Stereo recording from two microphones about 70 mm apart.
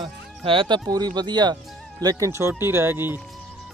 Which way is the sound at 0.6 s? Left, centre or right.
Right.